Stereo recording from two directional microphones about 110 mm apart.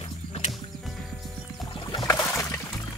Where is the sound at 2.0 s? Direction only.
30° left (ahead or behind).